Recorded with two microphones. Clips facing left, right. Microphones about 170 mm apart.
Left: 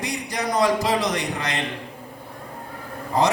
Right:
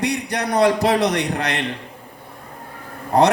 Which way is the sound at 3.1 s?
65° right (ahead or behind).